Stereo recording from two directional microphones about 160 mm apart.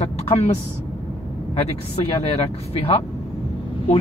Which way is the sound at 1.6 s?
40° left (ahead or behind).